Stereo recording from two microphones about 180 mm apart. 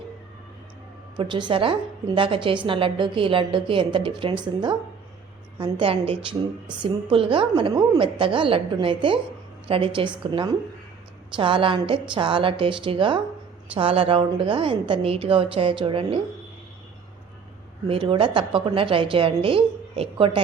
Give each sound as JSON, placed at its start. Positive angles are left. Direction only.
{"t": 1.1, "sound": "a woman's voice", "side_deg": -25}
{"t": 17.8, "sound": "a woman's voice", "side_deg": -30}